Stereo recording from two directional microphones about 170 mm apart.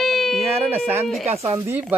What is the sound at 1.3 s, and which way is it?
Speech, 20° right (ahead or behind).